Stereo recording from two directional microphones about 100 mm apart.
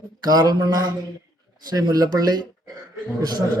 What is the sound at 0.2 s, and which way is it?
A man's voice, 40° right (ahead or behind).